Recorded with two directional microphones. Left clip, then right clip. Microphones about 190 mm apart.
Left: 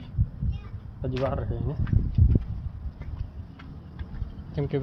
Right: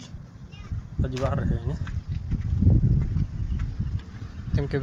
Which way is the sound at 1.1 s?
10° right (ahead or behind).